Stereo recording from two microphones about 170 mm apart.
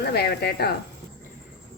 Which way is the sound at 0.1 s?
75° left (ahead or behind).